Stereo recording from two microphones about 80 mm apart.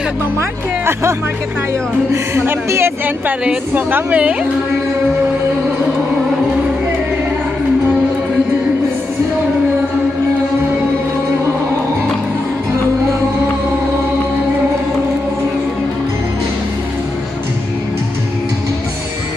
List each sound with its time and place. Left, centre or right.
0.4 s speech: right
2.3 s a woman's voice: right